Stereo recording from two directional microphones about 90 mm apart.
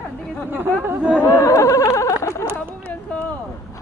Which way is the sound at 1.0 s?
10° right (ahead or behind).